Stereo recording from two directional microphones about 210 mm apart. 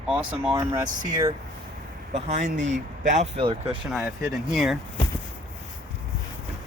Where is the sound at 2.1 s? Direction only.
30° right (ahead or behind).